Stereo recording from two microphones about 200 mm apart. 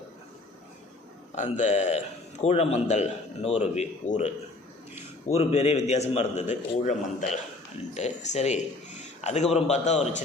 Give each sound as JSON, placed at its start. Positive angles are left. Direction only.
{"t": 1.4, "sound": "a man's voice", "side_deg": 35}
{"t": 5.3, "sound": "a man's voice", "side_deg": 30}